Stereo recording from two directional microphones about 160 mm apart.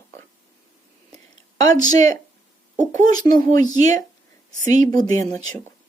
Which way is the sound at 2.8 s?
50° right (ahead or behind).